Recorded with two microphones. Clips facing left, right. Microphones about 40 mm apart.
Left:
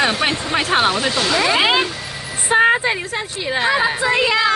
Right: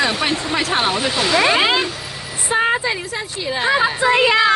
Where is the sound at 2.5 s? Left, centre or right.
Left.